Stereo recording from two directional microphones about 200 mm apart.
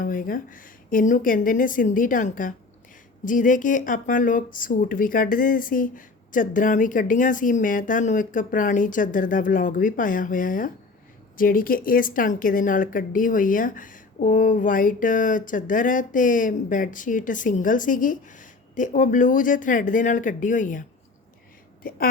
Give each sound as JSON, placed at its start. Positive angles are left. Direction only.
{"t": 0.0, "sound": "a woman's voice", "side_deg": 45}
{"t": 21.8, "sound": "a woman's voice", "side_deg": 45}